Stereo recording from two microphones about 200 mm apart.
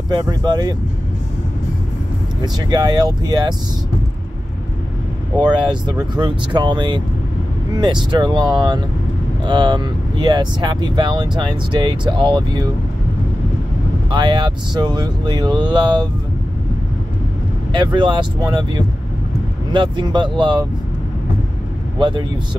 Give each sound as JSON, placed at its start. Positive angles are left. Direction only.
{"t": 0.1, "sound": "speech", "side_deg": -20}
{"t": 2.4, "sound": "speech", "side_deg": -20}
{"t": 5.4, "sound": "speech", "side_deg": -20}
{"t": 14.1, "sound": "speech", "side_deg": -25}
{"t": 17.7, "sound": "speech", "side_deg": -25}
{"t": 21.9, "sound": "speech", "side_deg": -25}